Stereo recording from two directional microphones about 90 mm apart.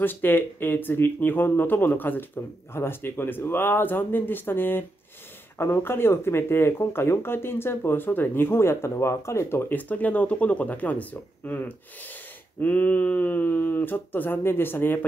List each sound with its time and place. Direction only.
0.0 s speech: 20° left (ahead or behind)